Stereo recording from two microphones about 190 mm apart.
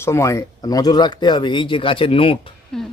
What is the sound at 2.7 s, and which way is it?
Speech, centre (ahead or behind).